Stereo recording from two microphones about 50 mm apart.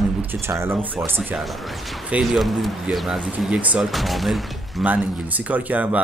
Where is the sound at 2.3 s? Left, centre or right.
Centre.